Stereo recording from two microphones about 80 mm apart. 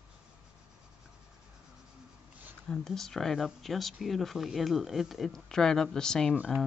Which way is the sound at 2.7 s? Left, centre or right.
Centre.